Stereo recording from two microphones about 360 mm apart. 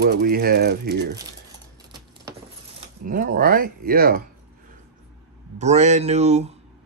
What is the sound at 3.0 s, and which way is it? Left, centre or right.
Speech, right.